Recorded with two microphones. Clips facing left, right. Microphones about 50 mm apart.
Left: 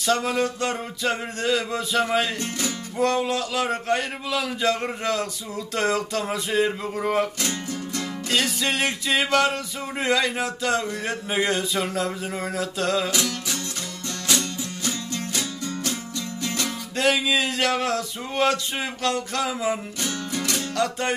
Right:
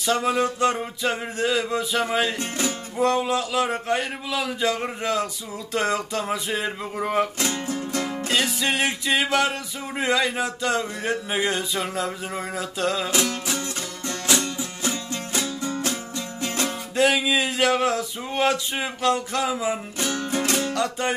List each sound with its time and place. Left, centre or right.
0.0 s a sound: centre
2.3 s music: right
3.0 s speech: centre
7.4 s music: right
8.3 s speech: centre
13.1 s music: right
16.9 s a sound: centre
20.0 s music: right
20.7 s music: centre